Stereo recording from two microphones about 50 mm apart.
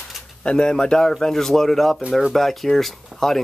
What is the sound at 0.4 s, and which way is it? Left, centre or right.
Speech, centre.